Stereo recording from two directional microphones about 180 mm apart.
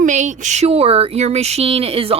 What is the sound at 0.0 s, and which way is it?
Speech, 40° right (ahead or behind).